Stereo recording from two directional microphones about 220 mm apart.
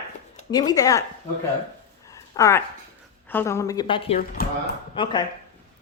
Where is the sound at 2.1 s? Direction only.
15° left (ahead or behind).